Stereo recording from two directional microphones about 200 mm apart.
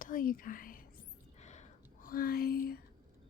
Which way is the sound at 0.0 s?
45° left (ahead or behind).